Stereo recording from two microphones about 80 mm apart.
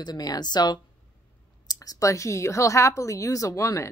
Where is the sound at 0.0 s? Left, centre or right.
Left.